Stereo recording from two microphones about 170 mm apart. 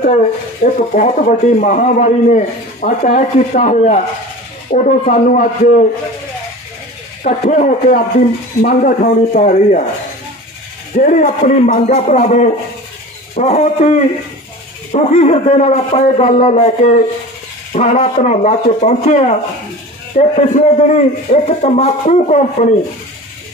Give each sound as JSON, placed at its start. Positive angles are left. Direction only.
{"t": 0.6, "sound": "a man's voice", "side_deg": 45}
{"t": 7.2, "sound": "a man's voice", "side_deg": 45}
{"t": 11.0, "sound": "a man's voice", "side_deg": 55}